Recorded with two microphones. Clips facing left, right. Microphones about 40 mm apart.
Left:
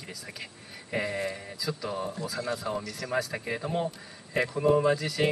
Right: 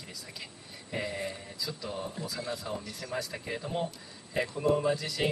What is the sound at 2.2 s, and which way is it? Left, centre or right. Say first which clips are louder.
Speech: left 3 dB; centre.